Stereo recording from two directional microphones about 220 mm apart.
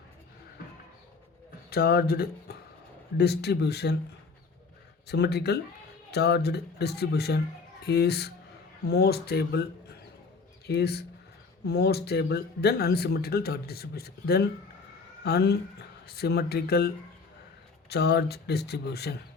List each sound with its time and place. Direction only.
1.7 s speech: 45° left (ahead or behind)
5.0 s speech: 50° left (ahead or behind)
10.7 s speech: 45° left (ahead or behind)